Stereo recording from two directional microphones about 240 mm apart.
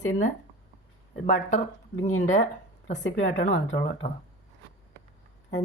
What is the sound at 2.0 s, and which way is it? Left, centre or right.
Speech, left.